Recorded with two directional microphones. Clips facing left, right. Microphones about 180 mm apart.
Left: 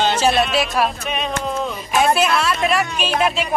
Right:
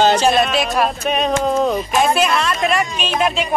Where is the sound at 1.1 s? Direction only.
40° right (ahead or behind).